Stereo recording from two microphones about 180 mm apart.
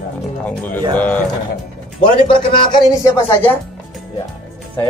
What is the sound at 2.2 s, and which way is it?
Speech, 25° left (ahead or behind).